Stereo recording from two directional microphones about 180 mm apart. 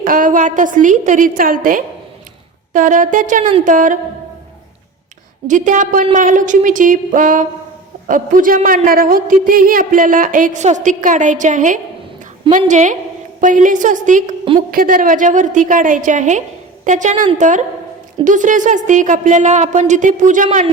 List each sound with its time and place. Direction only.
0.0 s a woman's voice: 50° right (ahead or behind)
5.5 s a woman's voice: 45° right (ahead or behind)